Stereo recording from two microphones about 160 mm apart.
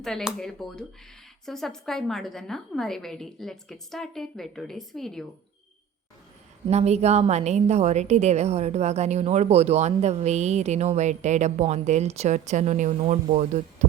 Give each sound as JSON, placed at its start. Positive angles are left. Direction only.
{"t": 0.0, "sound": "a woman's voice", "side_deg": 0}
{"t": 6.7, "sound": "a woman's voice", "side_deg": -45}